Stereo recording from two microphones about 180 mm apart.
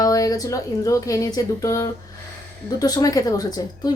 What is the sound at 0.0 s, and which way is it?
A woman's voice, 20° left (ahead or behind).